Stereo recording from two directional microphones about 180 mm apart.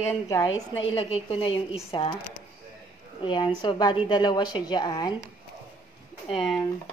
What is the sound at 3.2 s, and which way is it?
A woman's voice, 25° left (ahead or behind).